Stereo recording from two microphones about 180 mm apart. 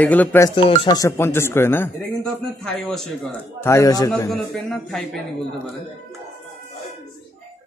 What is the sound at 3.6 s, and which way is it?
Speech, 15° left (ahead or behind).